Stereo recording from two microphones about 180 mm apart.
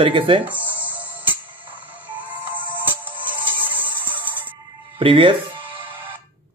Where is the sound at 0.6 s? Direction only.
10° right (ahead or behind).